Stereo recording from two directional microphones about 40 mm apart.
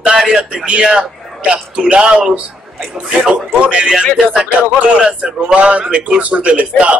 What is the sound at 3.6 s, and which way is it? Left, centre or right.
A man's voice, right.